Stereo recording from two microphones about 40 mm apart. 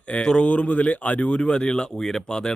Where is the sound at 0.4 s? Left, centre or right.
Left.